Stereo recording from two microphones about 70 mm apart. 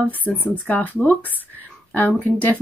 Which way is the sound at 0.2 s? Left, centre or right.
Left.